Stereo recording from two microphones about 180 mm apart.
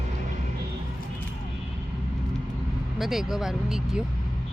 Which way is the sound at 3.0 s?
Centre (ahead or behind).